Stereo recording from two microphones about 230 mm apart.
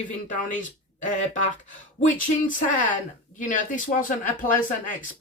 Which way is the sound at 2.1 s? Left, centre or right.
Left.